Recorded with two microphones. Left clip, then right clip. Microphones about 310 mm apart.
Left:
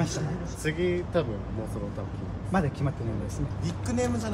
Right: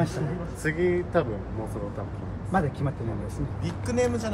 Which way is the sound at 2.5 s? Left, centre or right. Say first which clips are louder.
Right 2 dB; centre.